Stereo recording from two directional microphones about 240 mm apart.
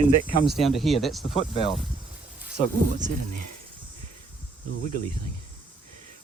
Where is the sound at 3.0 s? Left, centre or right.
Right.